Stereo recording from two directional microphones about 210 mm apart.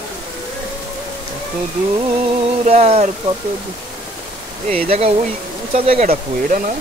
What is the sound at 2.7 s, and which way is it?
Speech, 30° right (ahead or behind).